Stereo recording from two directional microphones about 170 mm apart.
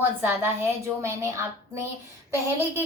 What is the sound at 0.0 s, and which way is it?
A woman's voice, 10° right (ahead or behind).